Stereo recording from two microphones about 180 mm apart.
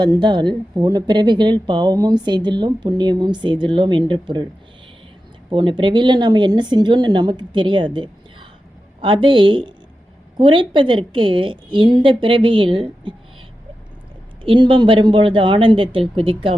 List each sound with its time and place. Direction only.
0.0 s speech: 25° right (ahead or behind)
5.5 s speech: 25° right (ahead or behind)
7.9 s a sound: 25° right (ahead or behind)
9.0 s speech: 30° right (ahead or behind)
14.4 s speech: 30° right (ahead or behind)